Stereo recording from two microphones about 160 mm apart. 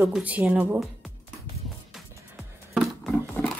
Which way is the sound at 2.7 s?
Centre (ahead or behind).